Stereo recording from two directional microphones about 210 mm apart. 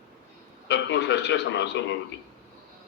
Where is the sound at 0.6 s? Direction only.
55° left (ahead or behind).